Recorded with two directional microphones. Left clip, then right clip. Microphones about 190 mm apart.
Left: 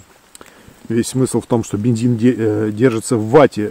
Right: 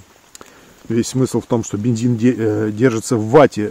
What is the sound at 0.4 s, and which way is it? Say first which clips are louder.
Speech: even; centre (ahead or behind).